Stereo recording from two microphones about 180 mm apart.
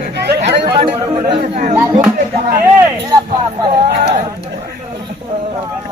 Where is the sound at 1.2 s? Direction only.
35° right (ahead or behind).